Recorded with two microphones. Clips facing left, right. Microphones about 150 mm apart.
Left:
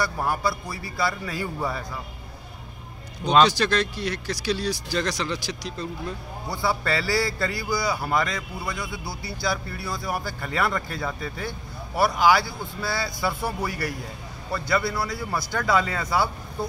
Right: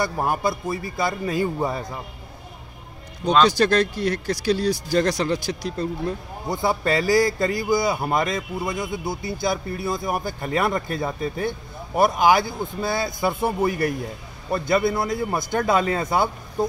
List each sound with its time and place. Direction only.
0.0 s speech: 20° right (ahead or behind)
3.4 s speech: 50° right (ahead or behind)
6.4 s speech: 20° right (ahead or behind)
15.3 s speech: 20° right (ahead or behind)